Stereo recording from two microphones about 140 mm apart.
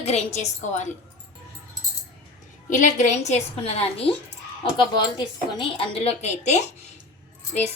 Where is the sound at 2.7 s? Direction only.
60° left (ahead or behind).